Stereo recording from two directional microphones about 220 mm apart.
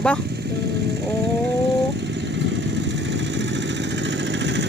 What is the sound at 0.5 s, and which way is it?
Speech, 50° right (ahead or behind).